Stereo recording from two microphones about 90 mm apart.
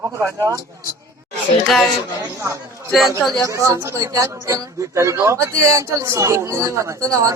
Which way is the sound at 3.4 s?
35° right (ahead or behind).